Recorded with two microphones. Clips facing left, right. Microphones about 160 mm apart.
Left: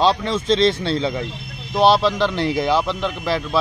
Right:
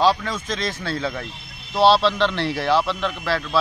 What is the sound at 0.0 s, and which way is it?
Speech, 25° left (ahead or behind).